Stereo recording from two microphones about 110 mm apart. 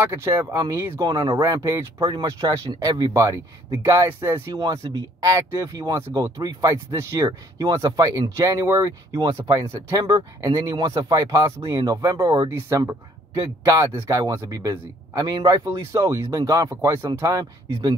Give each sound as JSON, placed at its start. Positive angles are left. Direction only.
{"t": 0.0, "sound": "speech", "side_deg": -25}
{"t": 1.0, "sound": "speech", "side_deg": -40}
{"t": 2.0, "sound": "speech", "side_deg": -45}
{"t": 2.2, "sound": "speech", "side_deg": -35}
{"t": 4.5, "sound": "speech", "side_deg": -40}
{"t": 5.9, "sound": "speech", "side_deg": -25}
{"t": 9.2, "sound": "speech", "side_deg": -40}
{"t": 9.7, "sound": "speech", "side_deg": -30}
{"t": 13.4, "sound": "speech", "side_deg": -35}
{"t": 13.9, "sound": "speech", "side_deg": -25}